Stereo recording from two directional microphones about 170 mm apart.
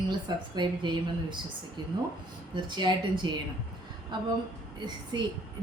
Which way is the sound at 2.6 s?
25° right (ahead or behind).